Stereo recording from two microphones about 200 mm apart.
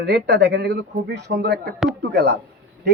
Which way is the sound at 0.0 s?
60° right (ahead or behind).